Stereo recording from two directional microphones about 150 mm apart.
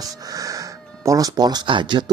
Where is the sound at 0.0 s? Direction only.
25° right (ahead or behind).